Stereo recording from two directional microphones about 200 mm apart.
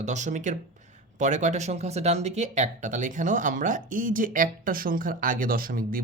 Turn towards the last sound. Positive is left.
turn(degrees=-45)  # may be behind; listen again after turning